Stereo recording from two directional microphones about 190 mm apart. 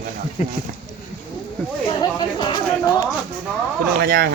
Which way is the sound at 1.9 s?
25° left (ahead or behind).